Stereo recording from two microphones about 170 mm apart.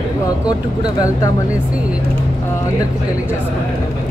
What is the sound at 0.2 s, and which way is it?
Speech, 20° left (ahead or behind).